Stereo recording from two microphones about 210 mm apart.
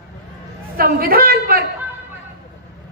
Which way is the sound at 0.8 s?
45° right (ahead or behind).